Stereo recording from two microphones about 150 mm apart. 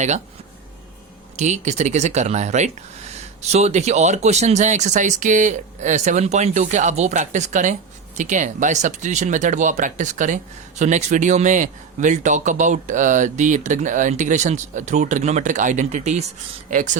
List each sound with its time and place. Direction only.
1.4 s speech: 50° right (ahead or behind)